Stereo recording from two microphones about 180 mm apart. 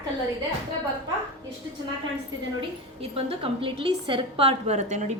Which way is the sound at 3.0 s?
30° right (ahead or behind).